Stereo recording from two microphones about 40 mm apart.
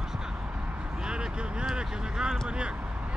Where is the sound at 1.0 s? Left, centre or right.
Right.